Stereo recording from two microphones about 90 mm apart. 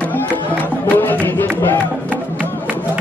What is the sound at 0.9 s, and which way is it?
Music, 25° left (ahead or behind).